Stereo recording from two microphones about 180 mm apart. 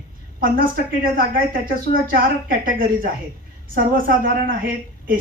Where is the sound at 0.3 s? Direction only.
50° right (ahead or behind).